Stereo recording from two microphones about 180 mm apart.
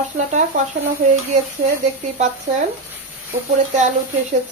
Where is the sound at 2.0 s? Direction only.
40° right (ahead or behind).